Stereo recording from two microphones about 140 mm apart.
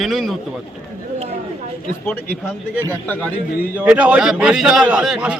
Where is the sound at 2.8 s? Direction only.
15° left (ahead or behind).